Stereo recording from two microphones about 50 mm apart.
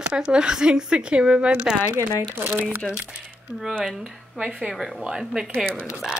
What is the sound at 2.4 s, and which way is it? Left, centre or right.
Speech, right.